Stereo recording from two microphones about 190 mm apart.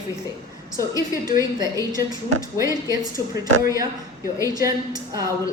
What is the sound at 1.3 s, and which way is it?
A woman's voice, 20° right (ahead or behind).